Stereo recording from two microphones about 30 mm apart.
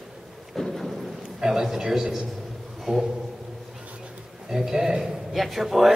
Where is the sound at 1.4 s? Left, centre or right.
Centre.